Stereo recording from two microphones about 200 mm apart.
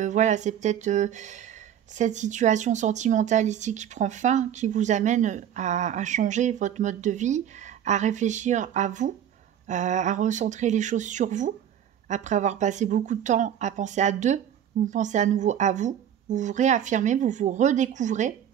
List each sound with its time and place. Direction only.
0.0 s speech: 35° right (ahead or behind)